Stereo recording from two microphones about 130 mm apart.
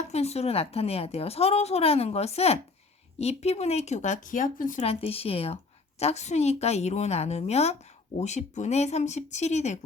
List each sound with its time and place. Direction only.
0.1 s a woman's voice: 55° left (ahead or behind); by 4.8 s 85° left
4.8 s a woman's voice: 50° left (ahead or behind)